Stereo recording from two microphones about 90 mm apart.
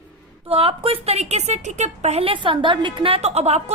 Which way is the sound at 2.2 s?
80° right.